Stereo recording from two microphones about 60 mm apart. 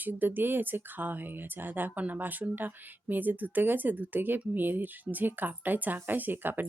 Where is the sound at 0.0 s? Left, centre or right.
Right.